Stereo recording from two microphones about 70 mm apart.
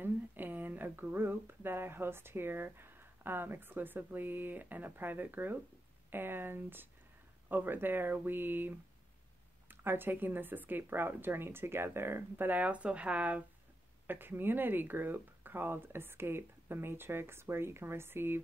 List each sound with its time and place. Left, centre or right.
0.0 s speech: right
14.0 s speech: right